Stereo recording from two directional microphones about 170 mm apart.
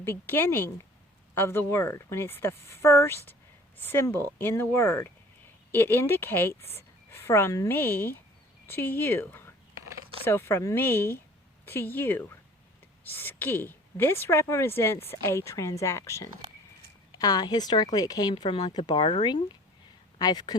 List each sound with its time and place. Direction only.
0.0 s a woman's voice: 15° left (ahead or behind)